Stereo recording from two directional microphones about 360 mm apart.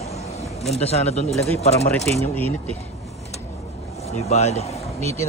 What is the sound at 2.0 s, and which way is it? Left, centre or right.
Speech, centre.